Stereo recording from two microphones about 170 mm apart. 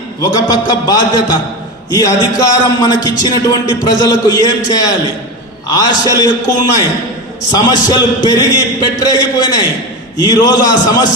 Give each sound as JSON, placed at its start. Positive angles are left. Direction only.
{"t": 0.2, "sound": "a man's voice", "side_deg": 20}